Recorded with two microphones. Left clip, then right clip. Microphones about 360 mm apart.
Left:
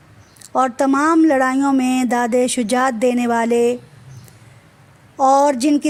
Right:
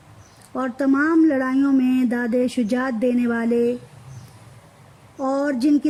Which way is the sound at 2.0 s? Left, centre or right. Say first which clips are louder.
Left 6 dB; left.